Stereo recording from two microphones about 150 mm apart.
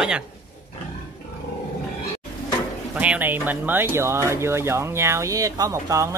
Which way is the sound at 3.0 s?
10° right (ahead or behind).